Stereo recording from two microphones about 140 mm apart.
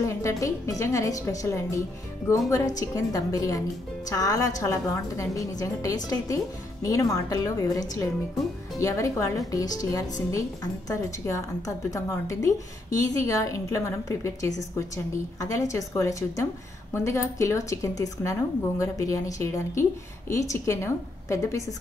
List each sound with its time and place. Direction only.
0.0 s a woman's voice: 20° left (ahead or behind)